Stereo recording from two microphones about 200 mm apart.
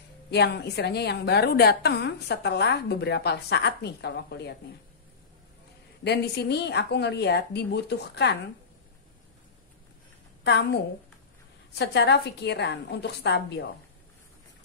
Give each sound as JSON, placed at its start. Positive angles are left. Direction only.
{"t": 0.3, "sound": "a woman's voice", "side_deg": 55}
{"t": 6.0, "sound": "a woman's voice", "side_deg": 55}
{"t": 10.4, "sound": "a woman's voice", "side_deg": 55}
{"t": 11.8, "sound": "a woman's voice", "side_deg": 60}